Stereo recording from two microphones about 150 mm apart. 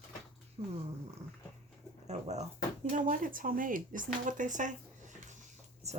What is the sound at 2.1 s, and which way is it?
Speech, 50° right (ahead or behind).